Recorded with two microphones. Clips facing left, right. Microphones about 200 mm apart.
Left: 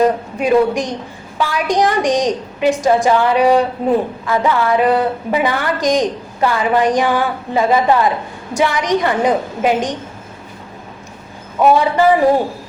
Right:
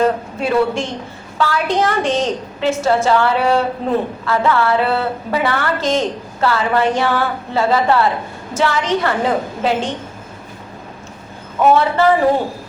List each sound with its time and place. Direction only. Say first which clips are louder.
0.0 s a woman's voice: left 2 dB; 15° left (ahead or behind)
11.6 s a woman's voice: left 1 dB; 15° left (ahead or behind)